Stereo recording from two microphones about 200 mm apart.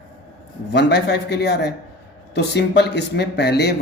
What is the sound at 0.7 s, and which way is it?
Speech, 60° left (ahead or behind).